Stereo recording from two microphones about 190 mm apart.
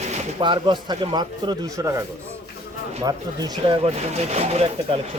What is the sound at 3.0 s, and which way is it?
Speech, 20° right (ahead or behind).